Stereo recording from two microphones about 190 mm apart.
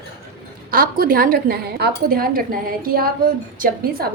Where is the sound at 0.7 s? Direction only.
50° right (ahead or behind).